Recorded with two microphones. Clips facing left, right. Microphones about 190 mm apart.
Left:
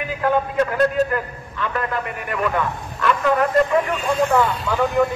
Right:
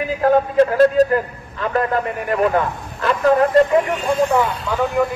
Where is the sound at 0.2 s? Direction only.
30° right (ahead or behind).